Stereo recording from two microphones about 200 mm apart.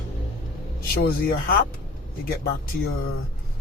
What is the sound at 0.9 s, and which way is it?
Speech, 50° left (ahead or behind).